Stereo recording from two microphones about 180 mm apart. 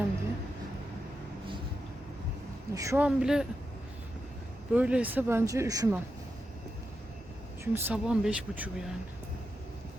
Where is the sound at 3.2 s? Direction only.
5° right (ahead or behind).